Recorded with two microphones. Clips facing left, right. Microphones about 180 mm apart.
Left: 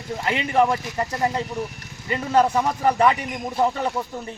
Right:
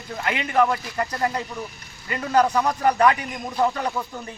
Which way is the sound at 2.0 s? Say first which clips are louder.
Left 1 dB; 25° left (ahead or behind).